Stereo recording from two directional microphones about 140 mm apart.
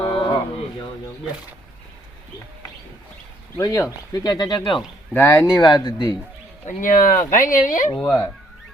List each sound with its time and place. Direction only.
0.0 s a sound: 40° left (ahead or behind)
3.6 s speech: 25° left (ahead or behind)
5.1 s speech: 20° left (ahead or behind)
6.7 s speech: 70° left (ahead or behind)
7.9 s speech: 5° left (ahead or behind)